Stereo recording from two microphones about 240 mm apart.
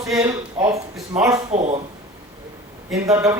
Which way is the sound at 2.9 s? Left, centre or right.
Centre.